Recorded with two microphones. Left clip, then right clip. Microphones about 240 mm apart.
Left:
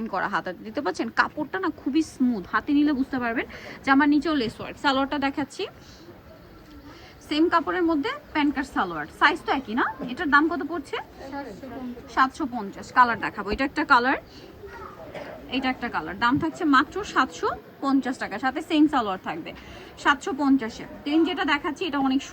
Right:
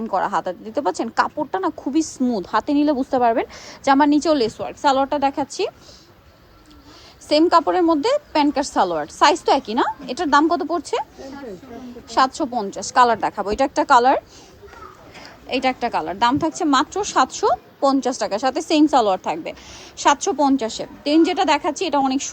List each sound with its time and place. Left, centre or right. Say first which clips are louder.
0.0 s a woman's voice: right 6 dB; centre
7.3 s a woman's voice: right 7 dB; centre
12.1 s a woman's voice: right 5 dB; right
15.4 s a woman's voice: right 8 dB; right